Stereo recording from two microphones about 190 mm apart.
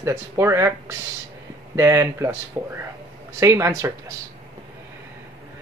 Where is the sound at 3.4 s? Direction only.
15° right (ahead or behind).